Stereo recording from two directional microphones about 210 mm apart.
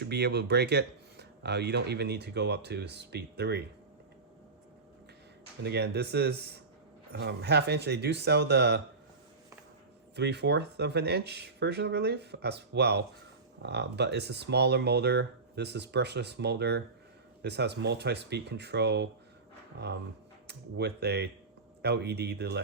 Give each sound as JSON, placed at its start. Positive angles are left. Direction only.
{"t": 0.0, "sound": "speech", "side_deg": -50}
{"t": 5.6, "sound": "speech", "side_deg": -50}
{"t": 10.2, "sound": "speech", "side_deg": -55}